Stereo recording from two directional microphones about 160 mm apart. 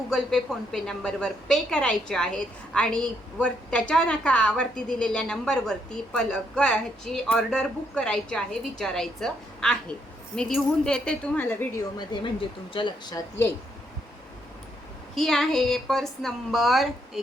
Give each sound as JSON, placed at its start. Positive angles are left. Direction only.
{"t": 0.1, "sound": "a woman's voice", "side_deg": 5}
{"t": 11.9, "sound": "speech", "side_deg": 30}
{"t": 15.1, "sound": "a woman's voice", "side_deg": 0}